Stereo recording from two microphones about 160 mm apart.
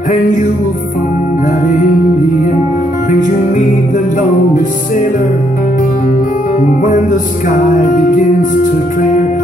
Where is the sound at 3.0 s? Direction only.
55° left (ahead or behind).